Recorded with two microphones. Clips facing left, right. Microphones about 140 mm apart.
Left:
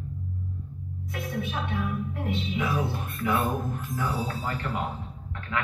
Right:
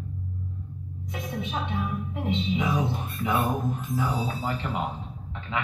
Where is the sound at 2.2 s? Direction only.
15° right (ahead or behind).